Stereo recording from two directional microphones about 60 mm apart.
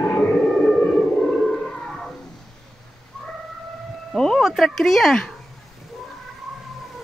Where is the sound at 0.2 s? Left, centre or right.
Left.